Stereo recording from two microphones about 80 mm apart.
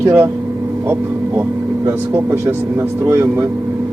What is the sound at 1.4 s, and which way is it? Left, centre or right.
A man's voice, right.